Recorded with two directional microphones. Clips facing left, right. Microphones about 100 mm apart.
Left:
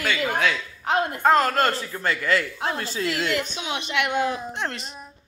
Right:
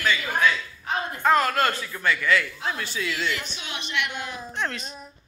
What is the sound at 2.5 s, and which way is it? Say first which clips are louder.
Speech: left 3 dB; 55° left (ahead or behind).